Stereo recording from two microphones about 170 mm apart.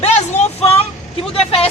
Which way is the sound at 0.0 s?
40° left (ahead or behind).